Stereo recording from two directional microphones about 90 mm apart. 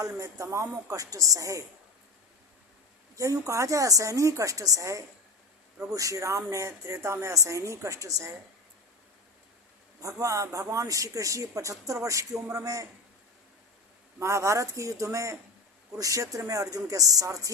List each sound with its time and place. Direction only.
0.0 s a woman's voice: 35° right (ahead or behind)
3.2 s a woman's voice: 40° right (ahead or behind)
10.0 s a woman's voice: 35° right (ahead or behind)
14.2 s a woman's voice: 30° right (ahead or behind)